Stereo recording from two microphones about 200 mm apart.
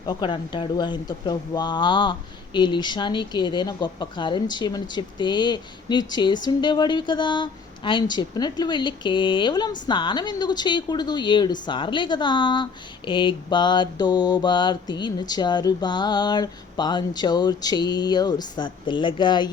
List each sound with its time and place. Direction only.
0.0 s speech: 20° left (ahead or behind)